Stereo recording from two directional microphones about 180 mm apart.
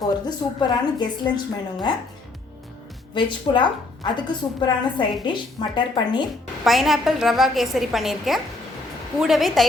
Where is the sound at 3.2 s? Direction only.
25° left (ahead or behind).